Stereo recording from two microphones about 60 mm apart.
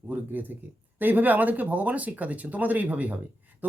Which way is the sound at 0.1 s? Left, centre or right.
Right.